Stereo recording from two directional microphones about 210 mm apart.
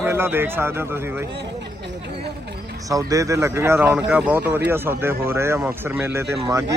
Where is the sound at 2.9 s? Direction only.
15° right (ahead or behind).